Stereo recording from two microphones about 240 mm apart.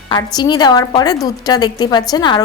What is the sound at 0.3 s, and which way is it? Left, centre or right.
A woman's voice, centre.